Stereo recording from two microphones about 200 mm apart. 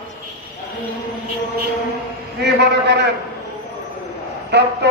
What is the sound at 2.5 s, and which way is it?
Speech, 55° right (ahead or behind).